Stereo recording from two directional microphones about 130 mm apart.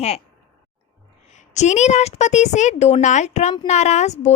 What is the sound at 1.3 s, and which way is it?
A woman's voice, 65° left (ahead or behind).